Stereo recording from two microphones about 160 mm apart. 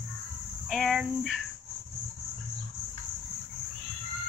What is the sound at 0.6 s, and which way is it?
Speech, centre (ahead or behind).